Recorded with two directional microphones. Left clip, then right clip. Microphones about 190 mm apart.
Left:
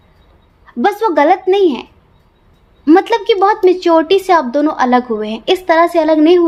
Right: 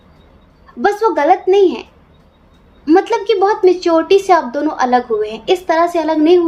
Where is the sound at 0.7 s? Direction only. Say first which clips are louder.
Left 2 dB; 50° left (ahead or behind).